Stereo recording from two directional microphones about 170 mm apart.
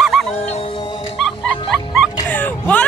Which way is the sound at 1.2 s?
Centre (ahead or behind).